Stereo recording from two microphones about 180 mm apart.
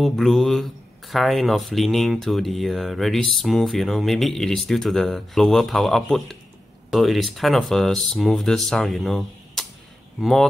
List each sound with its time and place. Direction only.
0.0 s speech: centre (ahead or behind)